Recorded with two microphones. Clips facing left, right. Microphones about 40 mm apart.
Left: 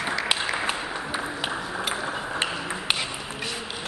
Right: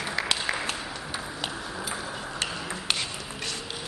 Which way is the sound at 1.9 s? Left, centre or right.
Left.